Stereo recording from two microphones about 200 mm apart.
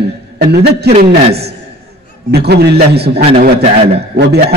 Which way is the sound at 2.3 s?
55° right (ahead or behind).